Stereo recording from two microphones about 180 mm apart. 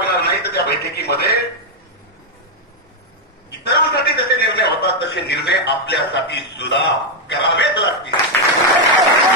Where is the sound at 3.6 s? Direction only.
60° left (ahead or behind).